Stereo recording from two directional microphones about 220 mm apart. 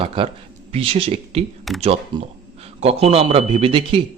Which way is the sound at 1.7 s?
Centre (ahead or behind).